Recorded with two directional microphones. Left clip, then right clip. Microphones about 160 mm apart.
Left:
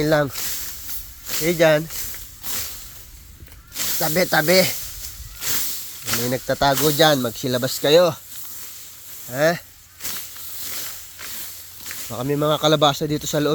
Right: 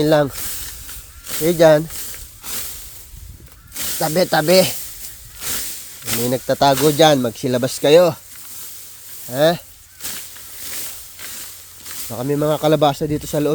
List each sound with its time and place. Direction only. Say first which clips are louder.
0.0 s speech: right 4 dB; 45° right (ahead or behind)
3.8 s snake: even; 30° right (ahead or behind)
4.0 s speech: right 3 dB; 40° right (ahead or behind)
6.2 s speech: right 5 dB; 45° right (ahead or behind)
9.2 s snake: right 4 dB; 45° right (ahead or behind)
12.1 s speech: right 2 dB; 30° right (ahead or behind)